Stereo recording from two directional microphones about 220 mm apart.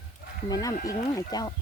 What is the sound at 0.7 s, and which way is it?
Speech, 40° left (ahead or behind).